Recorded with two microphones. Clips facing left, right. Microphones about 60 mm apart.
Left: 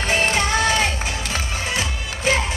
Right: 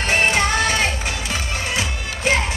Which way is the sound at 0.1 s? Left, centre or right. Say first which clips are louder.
Right 2 dB; right.